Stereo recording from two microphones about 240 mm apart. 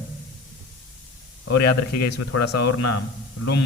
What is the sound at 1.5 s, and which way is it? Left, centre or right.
Speech, left.